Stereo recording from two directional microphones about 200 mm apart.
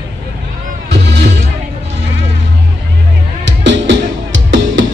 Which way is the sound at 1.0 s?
60° right (ahead or behind).